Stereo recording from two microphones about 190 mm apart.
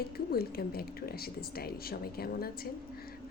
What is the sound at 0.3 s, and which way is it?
A woman's voice, 55° left (ahead or behind).